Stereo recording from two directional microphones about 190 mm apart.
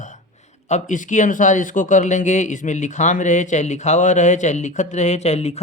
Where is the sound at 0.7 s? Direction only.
40° left (ahead or behind).